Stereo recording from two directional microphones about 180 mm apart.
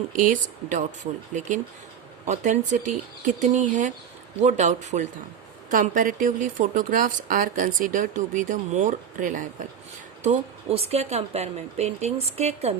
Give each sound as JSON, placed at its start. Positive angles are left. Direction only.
{"t": 0.2, "sound": "speech", "side_deg": -45}
{"t": 10.2, "sound": "speech", "side_deg": -35}